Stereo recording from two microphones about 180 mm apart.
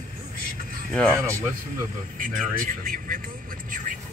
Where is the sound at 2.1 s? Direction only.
50° right (ahead or behind).